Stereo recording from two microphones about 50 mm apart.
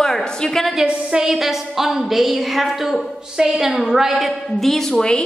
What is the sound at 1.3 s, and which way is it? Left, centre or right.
A woman's voice, centre.